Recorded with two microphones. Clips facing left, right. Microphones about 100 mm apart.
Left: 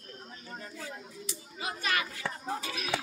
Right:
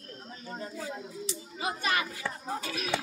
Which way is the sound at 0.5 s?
15° right (ahead or behind).